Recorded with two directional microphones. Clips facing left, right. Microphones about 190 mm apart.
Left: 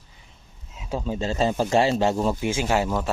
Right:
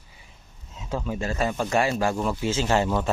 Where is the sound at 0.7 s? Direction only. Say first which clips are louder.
Left 1 dB; 10° left (ahead or behind).